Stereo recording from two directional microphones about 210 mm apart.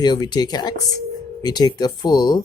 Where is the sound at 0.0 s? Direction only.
20° left (ahead or behind).